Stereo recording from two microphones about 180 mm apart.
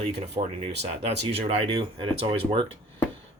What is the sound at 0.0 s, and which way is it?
Speech, 30° right (ahead or behind).